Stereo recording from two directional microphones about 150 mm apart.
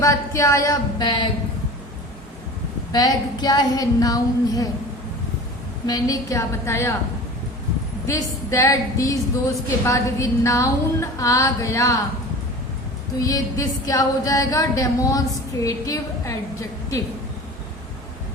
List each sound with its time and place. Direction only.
0.0 s a woman's voice: 20° left (ahead or behind)
2.9 s a woman's voice: 25° left (ahead or behind)
5.8 s a woman's voice: 25° left (ahead or behind)
8.0 s a woman's voice: 20° left (ahead or behind)
13.1 s a woman's voice: 25° left (ahead or behind)